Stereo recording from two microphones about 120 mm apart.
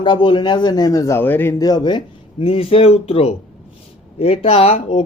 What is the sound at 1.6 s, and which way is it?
Speech, 35° left (ahead or behind).